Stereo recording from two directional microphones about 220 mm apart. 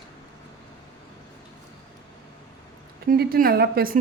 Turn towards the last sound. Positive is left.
turn(degrees=-45)  # may be behind; listen again after turning